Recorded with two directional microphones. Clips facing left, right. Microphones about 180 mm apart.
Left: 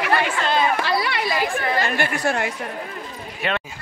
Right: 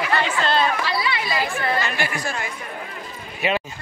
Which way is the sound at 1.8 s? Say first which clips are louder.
Left 3 dB; 50° left (ahead or behind).